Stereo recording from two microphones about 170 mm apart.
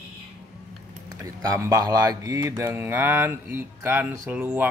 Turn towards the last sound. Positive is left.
turn(degrees=-10)  # may be behind; listen again after turning